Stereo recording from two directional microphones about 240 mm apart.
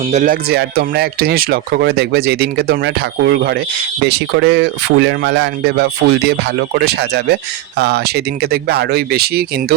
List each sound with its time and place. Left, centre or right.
0.1 s speech: right